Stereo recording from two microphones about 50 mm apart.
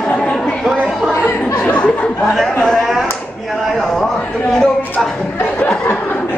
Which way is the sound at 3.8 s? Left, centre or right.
Centre.